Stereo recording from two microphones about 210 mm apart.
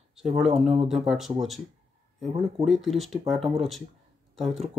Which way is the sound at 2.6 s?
Centre (ahead or behind).